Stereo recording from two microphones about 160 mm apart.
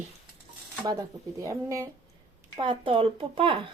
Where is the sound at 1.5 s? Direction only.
20° right (ahead or behind).